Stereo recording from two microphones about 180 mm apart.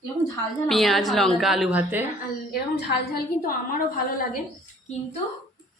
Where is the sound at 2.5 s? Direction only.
60° left (ahead or behind).